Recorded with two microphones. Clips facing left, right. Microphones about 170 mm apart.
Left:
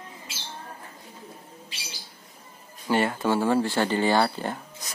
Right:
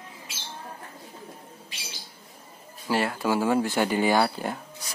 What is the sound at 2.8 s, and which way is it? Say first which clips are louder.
Speech: left 2 dB; centre (ahead or behind).